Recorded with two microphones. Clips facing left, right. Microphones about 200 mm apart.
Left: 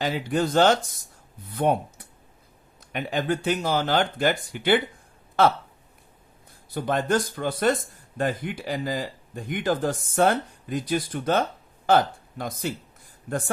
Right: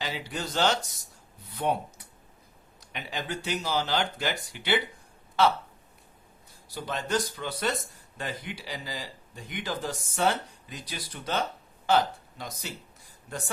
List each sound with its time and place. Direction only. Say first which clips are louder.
0.0 s speech: left 10 dB; 50° left (ahead or behind)
2.8 s speech: left 9 dB; 50° left (ahead or behind)
6.7 s speech: left 7 dB; 55° left (ahead or behind)